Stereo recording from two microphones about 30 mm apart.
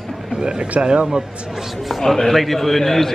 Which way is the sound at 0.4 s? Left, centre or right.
Right.